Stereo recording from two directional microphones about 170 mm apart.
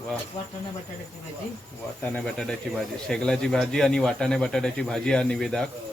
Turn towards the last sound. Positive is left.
turn(degrees=5)  # may be behind; listen again after turning